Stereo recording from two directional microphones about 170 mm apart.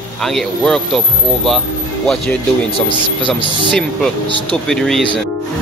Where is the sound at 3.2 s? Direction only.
30° left (ahead or behind).